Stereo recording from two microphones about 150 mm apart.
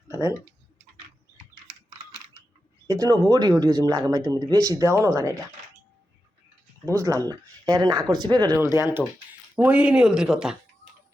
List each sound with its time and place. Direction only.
0.1 s speech: 15° right (ahead or behind)
2.8 s speech: 20° right (ahead or behind)
6.8 s speech: 20° right (ahead or behind)
8.5 s speech: 15° right (ahead or behind)